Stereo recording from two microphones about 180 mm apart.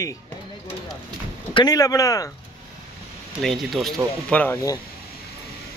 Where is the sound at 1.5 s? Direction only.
20° left (ahead or behind).